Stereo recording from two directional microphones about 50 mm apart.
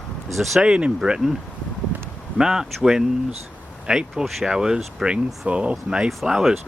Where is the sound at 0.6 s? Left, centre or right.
Centre.